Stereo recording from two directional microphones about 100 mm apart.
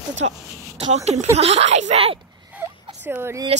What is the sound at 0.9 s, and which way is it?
Speech, 90° right.